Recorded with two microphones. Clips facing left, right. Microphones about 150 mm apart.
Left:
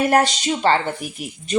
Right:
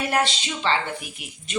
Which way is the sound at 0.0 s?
45° left (ahead or behind).